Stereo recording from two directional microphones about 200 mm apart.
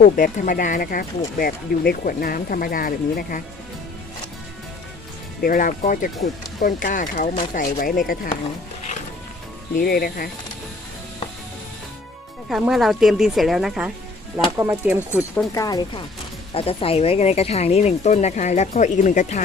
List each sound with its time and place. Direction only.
0.0 s speech: 40° left (ahead or behind)
5.4 s speech: 45° left (ahead or behind)
9.8 s speech: 50° left (ahead or behind)
12.5 s speech: centre (ahead or behind)
14.3 s speech: 15° right (ahead or behind)
15.5 s speech: 20° left (ahead or behind); by 19.4 s 40° left (ahead or behind)